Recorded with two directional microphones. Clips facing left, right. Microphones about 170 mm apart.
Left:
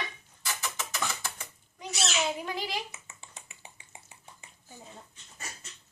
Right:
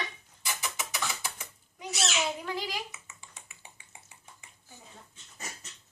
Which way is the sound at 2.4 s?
20° left (ahead or behind).